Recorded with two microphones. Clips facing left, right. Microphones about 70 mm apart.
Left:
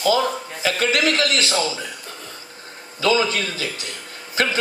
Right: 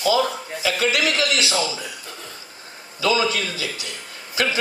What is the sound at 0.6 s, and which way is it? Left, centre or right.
A man's voice, left.